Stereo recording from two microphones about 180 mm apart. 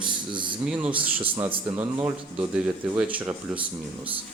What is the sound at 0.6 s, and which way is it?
Speech, 5° right (ahead or behind).